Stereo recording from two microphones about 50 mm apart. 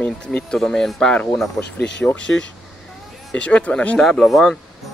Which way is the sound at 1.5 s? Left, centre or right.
Left.